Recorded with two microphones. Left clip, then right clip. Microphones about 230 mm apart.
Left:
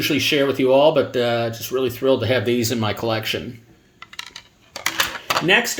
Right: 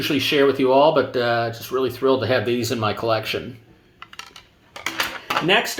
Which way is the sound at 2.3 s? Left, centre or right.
Left.